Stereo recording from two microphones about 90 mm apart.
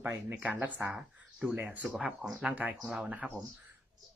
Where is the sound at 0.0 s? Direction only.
25° right (ahead or behind).